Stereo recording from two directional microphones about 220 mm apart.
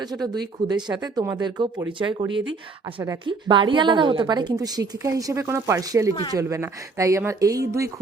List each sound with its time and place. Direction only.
0.0 s a woman's voice: 20° right (ahead or behind)